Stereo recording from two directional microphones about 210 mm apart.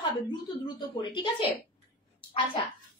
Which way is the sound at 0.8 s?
20° left (ahead or behind).